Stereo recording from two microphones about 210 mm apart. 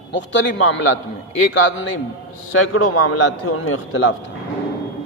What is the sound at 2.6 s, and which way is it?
A man's voice, 90° left.